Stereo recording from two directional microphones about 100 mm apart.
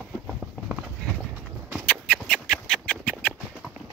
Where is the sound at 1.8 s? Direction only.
10° left (ahead or behind).